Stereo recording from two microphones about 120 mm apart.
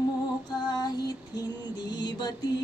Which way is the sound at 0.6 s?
35° left (ahead or behind).